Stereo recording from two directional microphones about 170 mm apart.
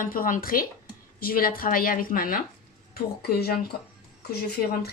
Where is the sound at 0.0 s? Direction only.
55° left (ahead or behind).